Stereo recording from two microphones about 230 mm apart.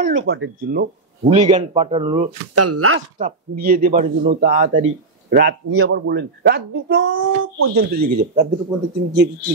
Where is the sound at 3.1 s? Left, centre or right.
Right.